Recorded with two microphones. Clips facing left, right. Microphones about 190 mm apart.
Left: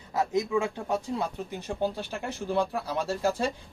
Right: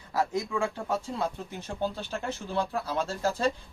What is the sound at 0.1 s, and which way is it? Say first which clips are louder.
Speech: left 3 dB; 20° left (ahead or behind).